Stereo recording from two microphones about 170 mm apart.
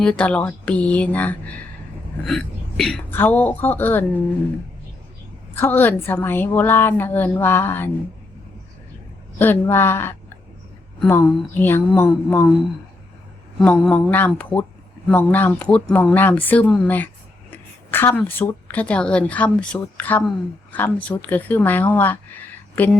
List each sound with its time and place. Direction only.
0.0 s speech: 5° left (ahead or behind)
5.5 s speech: 10° left (ahead or behind)
9.4 s speech: 10° left (ahead or behind)
13.6 s speech: 5° left (ahead or behind)